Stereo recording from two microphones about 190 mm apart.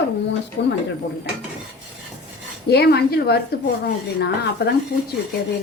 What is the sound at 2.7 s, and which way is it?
A woman's voice, 55° left (ahead or behind).